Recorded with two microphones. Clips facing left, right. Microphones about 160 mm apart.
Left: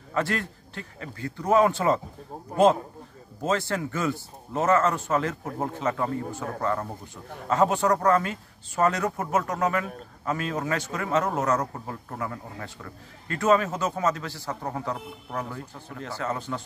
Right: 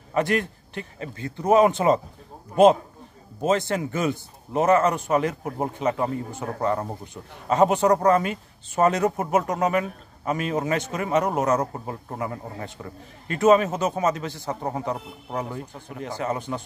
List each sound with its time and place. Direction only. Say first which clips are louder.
0.1 s speech: right 5 dB; 15° right (ahead or behind)